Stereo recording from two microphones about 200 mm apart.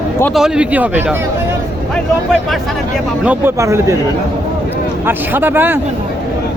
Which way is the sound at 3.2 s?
15° right (ahead or behind).